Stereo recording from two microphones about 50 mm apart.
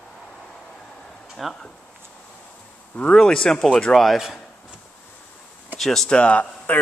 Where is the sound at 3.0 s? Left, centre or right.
Centre.